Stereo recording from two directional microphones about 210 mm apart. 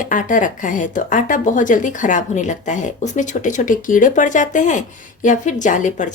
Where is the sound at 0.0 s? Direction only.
40° left (ahead or behind).